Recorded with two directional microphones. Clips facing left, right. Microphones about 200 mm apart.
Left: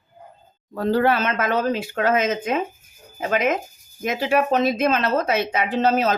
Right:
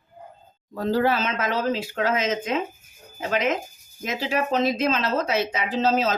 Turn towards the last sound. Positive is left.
turn(degrees=55)  # may be behind; listen again after turning